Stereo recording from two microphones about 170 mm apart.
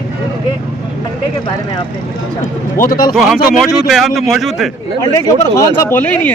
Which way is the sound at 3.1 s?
Centre (ahead or behind).